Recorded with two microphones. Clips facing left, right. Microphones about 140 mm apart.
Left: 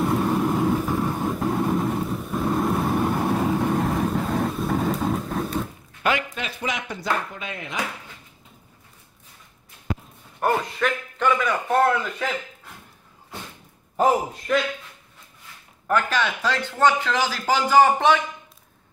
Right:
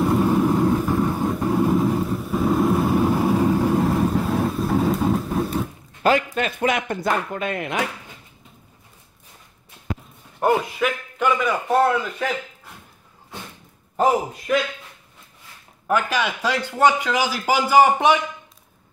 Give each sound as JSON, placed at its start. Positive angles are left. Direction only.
{"t": 0.0, "sound": "vehicle", "side_deg": 0}
{"t": 6.0, "sound": "a man's voice", "side_deg": -40}
{"t": 6.4, "sound": "speech", "side_deg": -55}
{"t": 10.4, "sound": "a man's voice", "side_deg": -10}
{"t": 14.5, "sound": "a man's voice", "side_deg": -5}
{"t": 15.9, "sound": "a man's voice", "side_deg": -10}